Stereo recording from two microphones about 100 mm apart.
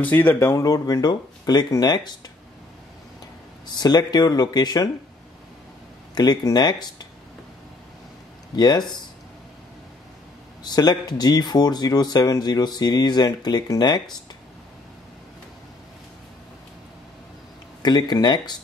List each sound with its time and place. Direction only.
0.0 s speech: 20° left (ahead or behind); by 2.1 s 40° left (ahead or behind)
3.6 s speech: 45° left (ahead or behind)
6.1 s speech: 45° left (ahead or behind)
8.5 s speech: 45° left (ahead or behind)
10.6 s speech: 45° left (ahead or behind)
17.8 s speech: 45° left (ahead or behind)